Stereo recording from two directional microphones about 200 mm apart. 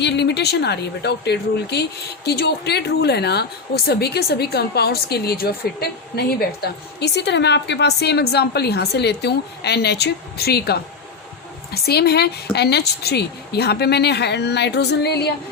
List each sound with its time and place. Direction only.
0.0 s a woman's voice: 60° left (ahead or behind)